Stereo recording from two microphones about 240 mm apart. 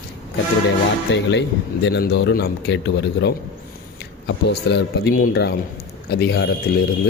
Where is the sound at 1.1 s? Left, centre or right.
Left.